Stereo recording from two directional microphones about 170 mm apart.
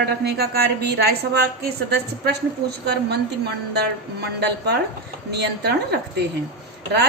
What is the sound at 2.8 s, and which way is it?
A woman's voice, 75° right (ahead or behind).